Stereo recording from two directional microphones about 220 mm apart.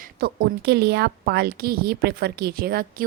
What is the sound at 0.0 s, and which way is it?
A woman's voice, 45° right (ahead or behind).